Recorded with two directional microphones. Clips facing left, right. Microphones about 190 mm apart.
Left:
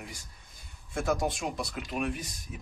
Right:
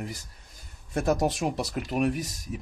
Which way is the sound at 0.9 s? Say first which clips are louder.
Right 4 dB; 40° right (ahead or behind).